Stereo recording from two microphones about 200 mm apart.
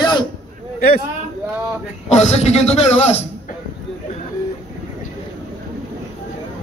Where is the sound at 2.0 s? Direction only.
35° left (ahead or behind).